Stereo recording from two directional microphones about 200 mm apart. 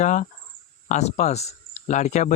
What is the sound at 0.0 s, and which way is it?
Speech, 40° left (ahead or behind).